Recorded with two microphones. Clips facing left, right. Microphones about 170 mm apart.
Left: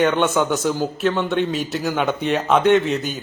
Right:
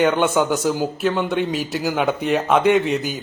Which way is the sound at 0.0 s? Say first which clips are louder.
Right 1 dB; 5° right (ahead or behind).